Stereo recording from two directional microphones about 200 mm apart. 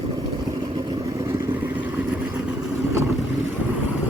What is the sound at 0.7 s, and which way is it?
Vehicle, 20° right (ahead or behind).